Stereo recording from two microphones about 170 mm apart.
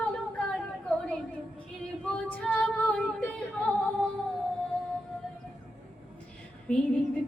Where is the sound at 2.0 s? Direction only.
5° left (ahead or behind).